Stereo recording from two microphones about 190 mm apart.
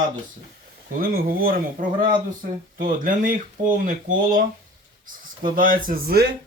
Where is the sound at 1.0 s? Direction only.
50° right (ahead or behind).